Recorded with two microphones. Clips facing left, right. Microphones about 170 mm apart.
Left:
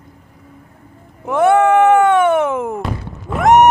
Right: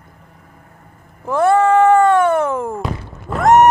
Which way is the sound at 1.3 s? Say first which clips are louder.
Left 1 dB; 20° left (ahead or behind).